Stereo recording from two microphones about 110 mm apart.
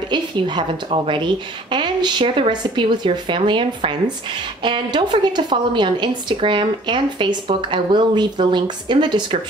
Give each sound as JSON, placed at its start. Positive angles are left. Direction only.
{"t": 0.1, "sound": "speech", "side_deg": -45}